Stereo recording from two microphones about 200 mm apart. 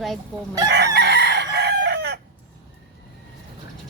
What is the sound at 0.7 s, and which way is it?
Chicken, 55° right (ahead or behind).